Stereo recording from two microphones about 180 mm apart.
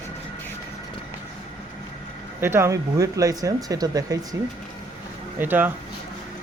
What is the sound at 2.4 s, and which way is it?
Speech, 15° right (ahead or behind).